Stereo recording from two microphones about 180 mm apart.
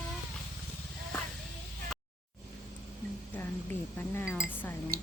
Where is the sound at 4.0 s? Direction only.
15° left (ahead or behind).